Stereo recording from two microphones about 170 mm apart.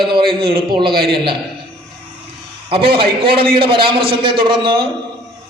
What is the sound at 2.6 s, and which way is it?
A man's voice, 30° right (ahead or behind).